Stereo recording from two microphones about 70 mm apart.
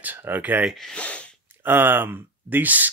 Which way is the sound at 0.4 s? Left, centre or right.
Right.